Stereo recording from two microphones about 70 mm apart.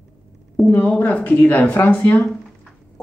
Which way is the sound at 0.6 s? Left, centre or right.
Left.